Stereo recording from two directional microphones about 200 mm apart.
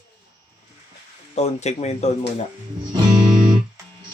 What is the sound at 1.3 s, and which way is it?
Speech, 35° left (ahead or behind).